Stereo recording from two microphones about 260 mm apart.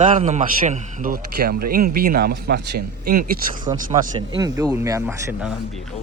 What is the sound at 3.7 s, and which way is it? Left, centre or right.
Speech, centre.